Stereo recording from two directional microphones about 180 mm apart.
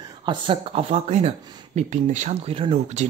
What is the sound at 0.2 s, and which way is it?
Speech, 25° right (ahead or behind).